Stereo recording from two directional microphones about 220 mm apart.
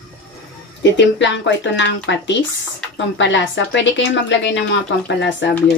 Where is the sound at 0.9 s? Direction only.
55° left (ahead or behind).